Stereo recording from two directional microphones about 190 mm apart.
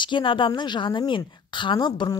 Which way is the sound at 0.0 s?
25° left (ahead or behind).